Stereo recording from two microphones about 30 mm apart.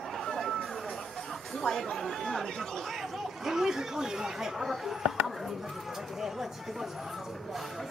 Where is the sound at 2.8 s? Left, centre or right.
Centre.